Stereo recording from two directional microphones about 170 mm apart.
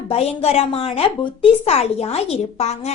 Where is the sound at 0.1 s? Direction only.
35° left (ahead or behind).